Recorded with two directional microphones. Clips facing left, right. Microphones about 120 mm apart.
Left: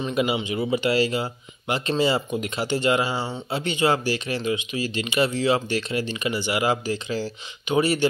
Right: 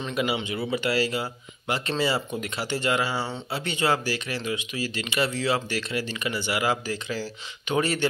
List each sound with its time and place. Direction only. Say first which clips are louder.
0.0 s speech: left 3 dB; 20° left (ahead or behind)